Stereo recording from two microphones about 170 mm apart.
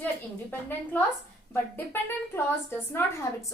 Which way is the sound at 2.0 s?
15° left (ahead or behind).